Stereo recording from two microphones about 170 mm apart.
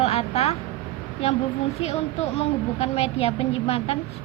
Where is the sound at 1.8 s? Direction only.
40° left (ahead or behind).